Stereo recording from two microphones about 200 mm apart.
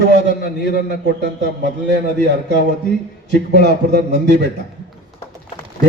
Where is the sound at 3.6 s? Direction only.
60° right (ahead or behind).